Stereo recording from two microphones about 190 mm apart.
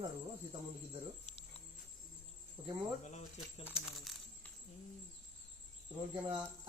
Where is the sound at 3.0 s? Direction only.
40° left (ahead or behind).